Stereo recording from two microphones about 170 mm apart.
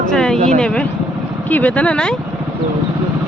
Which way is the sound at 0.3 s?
40° right (ahead or behind).